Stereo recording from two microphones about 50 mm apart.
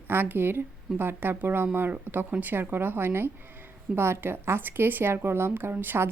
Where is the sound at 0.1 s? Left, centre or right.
Right.